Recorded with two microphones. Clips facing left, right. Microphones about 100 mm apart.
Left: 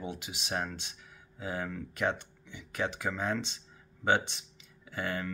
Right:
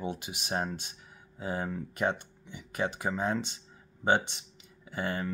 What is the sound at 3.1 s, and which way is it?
Speech, 20° right (ahead or behind).